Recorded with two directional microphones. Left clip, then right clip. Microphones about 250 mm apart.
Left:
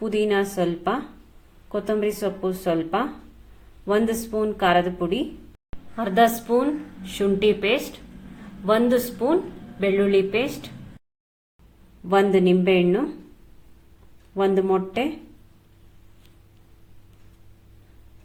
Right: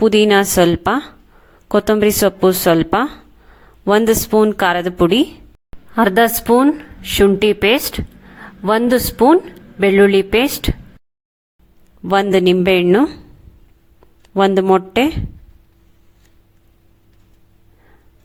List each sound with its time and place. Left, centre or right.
0.0 s a woman's voice: right
12.0 s a woman's voice: right
14.3 s a woman's voice: right